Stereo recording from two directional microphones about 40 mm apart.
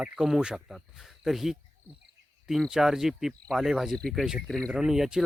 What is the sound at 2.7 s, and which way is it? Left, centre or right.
Speech, centre.